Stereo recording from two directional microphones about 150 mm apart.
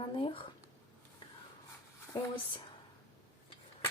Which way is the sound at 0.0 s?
35° left (ahead or behind).